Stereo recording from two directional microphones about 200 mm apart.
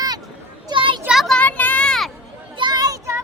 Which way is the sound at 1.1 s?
Centre (ahead or behind).